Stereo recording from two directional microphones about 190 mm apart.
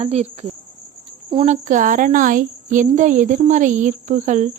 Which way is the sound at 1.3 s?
35° right (ahead or behind).